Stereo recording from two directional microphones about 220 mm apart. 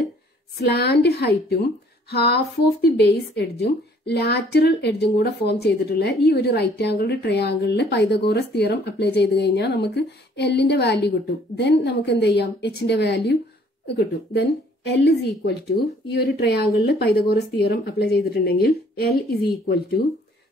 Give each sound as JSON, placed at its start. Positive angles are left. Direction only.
{"t": 0.6, "sound": "speech", "side_deg": 45}